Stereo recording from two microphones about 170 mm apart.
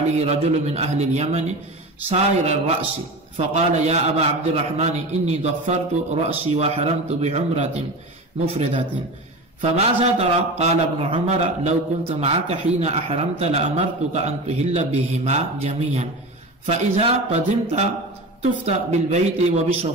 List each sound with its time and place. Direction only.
0.1 s a man's voice: 40° right (ahead or behind)
9.6 s a man's voice: 40° right (ahead or behind)